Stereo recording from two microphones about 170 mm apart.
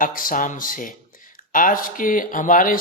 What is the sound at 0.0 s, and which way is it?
Speech, 55° left (ahead or behind).